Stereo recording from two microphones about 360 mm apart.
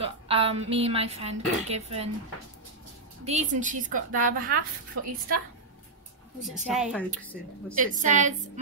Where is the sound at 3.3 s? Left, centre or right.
Centre.